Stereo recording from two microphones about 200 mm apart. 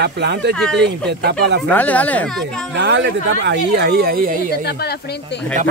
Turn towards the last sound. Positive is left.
turn(degrees=55)  # may be behind; listen again after turning